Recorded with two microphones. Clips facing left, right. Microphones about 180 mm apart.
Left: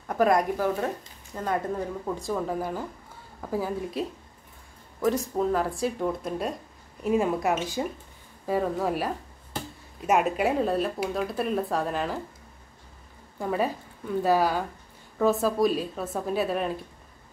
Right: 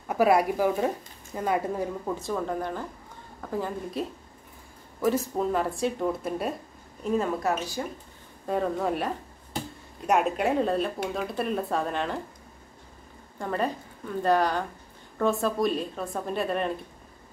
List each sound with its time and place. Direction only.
0.1 s a woman's voice: 5° right (ahead or behind)
5.0 s speech: centre (ahead or behind)
7.0 s a woman's voice: 10° left (ahead or behind)
8.5 s speech: centre (ahead or behind)
13.4 s a woman's voice: 5° left (ahead or behind)